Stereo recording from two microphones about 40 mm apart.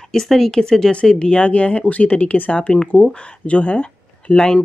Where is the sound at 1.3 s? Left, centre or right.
Left.